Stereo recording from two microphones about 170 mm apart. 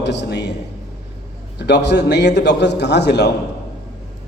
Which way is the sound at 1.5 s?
80° left.